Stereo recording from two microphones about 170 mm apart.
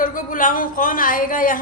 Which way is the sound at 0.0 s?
50° left (ahead or behind).